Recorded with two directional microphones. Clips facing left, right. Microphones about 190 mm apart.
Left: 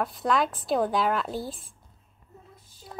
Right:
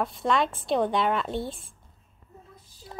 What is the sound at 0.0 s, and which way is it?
A woman's voice, centre (ahead or behind).